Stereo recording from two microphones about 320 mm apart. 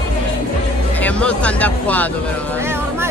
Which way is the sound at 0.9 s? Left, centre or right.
Centre.